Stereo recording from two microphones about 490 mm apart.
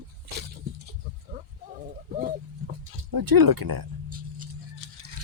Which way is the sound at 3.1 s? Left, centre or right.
Right.